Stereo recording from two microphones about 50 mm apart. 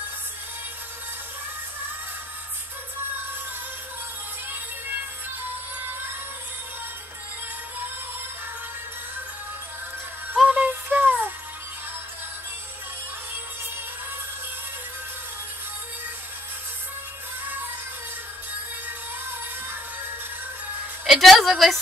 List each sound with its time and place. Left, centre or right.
10.4 s music: right
10.7 s music: right
21.1 s a woman's voice: centre